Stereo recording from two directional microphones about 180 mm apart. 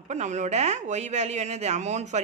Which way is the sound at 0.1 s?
40° right (ahead or behind).